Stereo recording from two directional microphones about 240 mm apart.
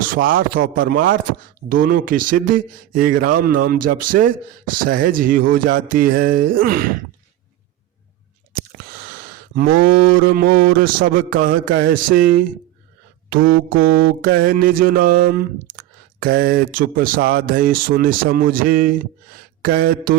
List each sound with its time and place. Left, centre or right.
0.1 s speech: right
9.6 s speech: right